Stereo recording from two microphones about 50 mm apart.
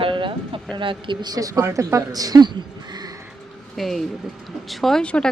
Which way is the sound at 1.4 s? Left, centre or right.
Right.